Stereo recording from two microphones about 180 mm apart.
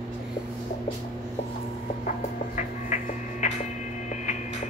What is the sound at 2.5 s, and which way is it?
Music, 40° left (ahead or behind).